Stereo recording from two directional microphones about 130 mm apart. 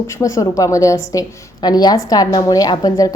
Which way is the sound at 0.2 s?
25° left (ahead or behind).